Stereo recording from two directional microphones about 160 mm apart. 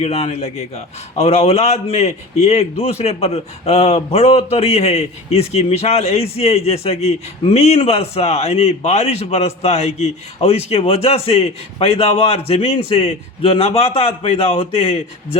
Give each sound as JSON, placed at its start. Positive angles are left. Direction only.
{"t": 0.0, "sound": "a man's voice", "side_deg": 40}